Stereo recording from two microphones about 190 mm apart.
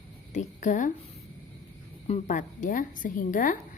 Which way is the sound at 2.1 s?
40° left (ahead or behind).